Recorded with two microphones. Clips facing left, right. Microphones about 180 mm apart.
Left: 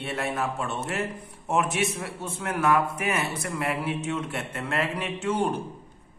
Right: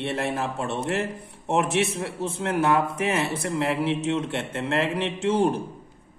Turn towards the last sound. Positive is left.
turn(degrees=-25)  # may be behind; listen again after turning